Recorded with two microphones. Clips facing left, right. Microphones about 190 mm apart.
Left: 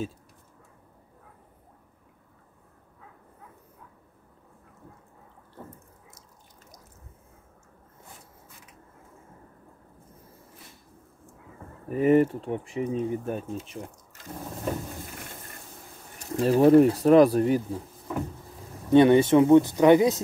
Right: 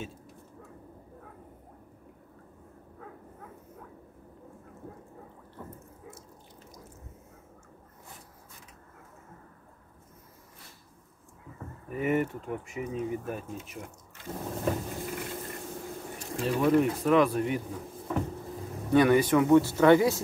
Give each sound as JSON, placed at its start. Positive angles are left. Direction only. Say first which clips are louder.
{"t": 11.9, "sound": "speech", "louder": "left 8 dB", "side_deg": 35}
{"t": 16.3, "sound": "speech", "louder": "left 8 dB", "side_deg": 35}
{"t": 18.9, "sound": "speech", "louder": "left 5 dB", "side_deg": 25}